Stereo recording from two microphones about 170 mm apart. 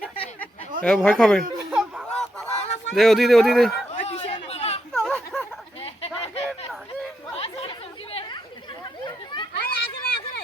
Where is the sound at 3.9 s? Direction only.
40° left (ahead or behind).